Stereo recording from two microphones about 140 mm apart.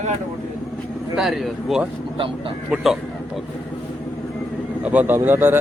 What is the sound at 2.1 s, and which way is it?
Speech, 40° right (ahead or behind).